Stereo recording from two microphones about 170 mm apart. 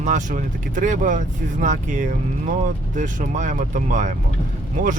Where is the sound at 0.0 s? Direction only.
45° right (ahead or behind).